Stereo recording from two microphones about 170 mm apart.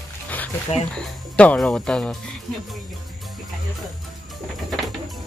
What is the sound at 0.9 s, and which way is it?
Speech, 5° left (ahead or behind).